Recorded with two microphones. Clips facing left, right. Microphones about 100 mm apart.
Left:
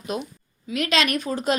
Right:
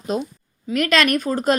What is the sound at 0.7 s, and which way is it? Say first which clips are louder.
Speech: right 5 dB; 50° right (ahead or behind).